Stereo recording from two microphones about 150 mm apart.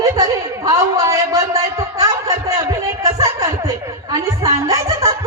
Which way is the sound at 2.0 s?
20° right (ahead or behind).